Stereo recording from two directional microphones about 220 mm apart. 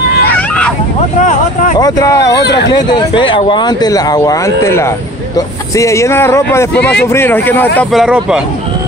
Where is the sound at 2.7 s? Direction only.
20° left (ahead or behind); by 8.4 s 5° right (ahead or behind).